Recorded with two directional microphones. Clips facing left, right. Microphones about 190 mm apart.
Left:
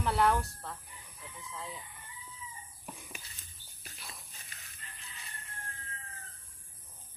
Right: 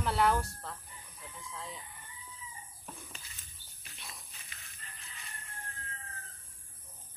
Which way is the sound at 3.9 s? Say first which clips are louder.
Even; centre (ahead or behind).